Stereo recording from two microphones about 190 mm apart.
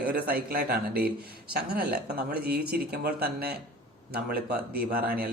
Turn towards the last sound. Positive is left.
turn(degrees=-50)  # may be behind; listen again after turning